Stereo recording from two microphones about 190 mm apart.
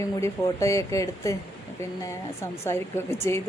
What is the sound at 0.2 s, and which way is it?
A woman's voice, 15° left (ahead or behind).